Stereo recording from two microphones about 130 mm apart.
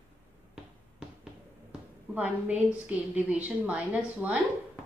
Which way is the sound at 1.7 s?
10° right (ahead or behind).